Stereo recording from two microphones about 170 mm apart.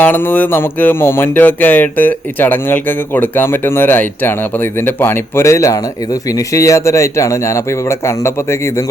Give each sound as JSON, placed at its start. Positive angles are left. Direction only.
{"t": 0.0, "sound": "music", "side_deg": 10}